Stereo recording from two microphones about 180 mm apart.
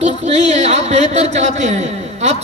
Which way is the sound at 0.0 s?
40° right (ahead or behind).